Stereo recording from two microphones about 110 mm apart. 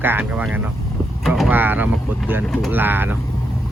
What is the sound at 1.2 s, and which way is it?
Vehicle, centre (ahead or behind).